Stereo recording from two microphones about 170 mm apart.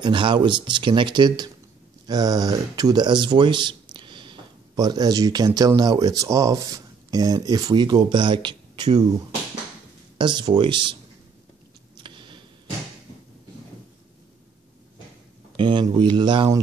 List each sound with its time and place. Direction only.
0.0 s speech: 30° right (ahead or behind)
10.1 s speech: 25° right (ahead or behind)
12.0 s tick: 30° right (ahead or behind)
15.5 s speech: 30° right (ahead or behind)